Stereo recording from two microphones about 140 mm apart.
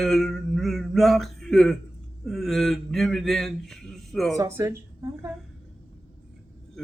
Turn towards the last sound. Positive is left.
turn(degrees=-20)  # may be behind; listen again after turning